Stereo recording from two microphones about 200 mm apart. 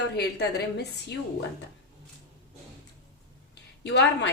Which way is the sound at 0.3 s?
55° left (ahead or behind).